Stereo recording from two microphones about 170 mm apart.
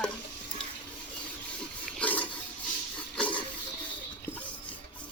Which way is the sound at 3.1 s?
10° left (ahead or behind).